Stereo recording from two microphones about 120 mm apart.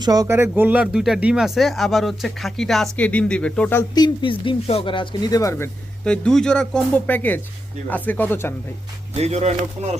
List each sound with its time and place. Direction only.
0.0 s speech: 30° right (ahead or behind)
0.3 s speech: 20° right (ahead or behind); by 3.8 s 10° left (ahead or behind)
3.9 s speech: 40° left (ahead or behind)
4.6 s speech: 55° left (ahead or behind)
5.3 s speech: 25° left (ahead or behind)
6.1 s speech: 5° left (ahead or behind)
9.1 s speech: 65° right (ahead or behind)